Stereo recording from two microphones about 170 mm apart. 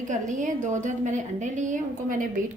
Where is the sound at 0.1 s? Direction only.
45° right (ahead or behind).